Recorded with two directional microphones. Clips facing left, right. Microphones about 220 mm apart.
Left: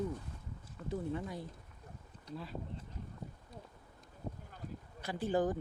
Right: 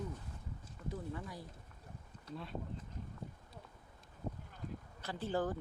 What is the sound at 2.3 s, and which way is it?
Speech, centre (ahead or behind).